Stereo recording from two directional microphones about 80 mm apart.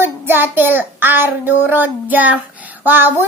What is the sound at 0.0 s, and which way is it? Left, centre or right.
Child singing, right.